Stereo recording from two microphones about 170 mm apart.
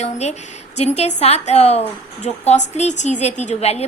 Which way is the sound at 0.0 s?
40° left (ahead or behind).